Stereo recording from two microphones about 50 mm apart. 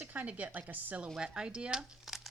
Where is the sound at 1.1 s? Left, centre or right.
Centre.